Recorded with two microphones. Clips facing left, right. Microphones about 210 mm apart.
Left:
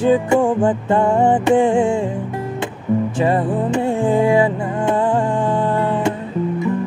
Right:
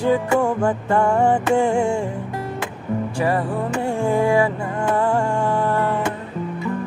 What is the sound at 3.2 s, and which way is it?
Music, 20° left (ahead or behind).